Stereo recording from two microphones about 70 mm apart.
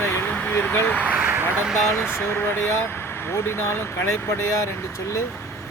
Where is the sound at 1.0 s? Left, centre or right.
Right.